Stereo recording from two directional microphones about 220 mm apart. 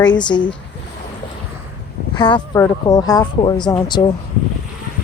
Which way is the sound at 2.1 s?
20° left (ahead or behind).